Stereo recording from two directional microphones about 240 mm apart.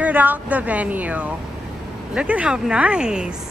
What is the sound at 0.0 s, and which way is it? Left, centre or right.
A woman's voice, centre.